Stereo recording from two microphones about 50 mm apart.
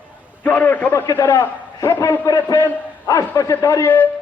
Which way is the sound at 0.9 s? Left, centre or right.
Left.